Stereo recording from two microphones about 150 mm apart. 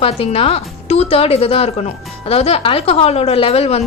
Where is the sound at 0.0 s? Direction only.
40° left (ahead or behind).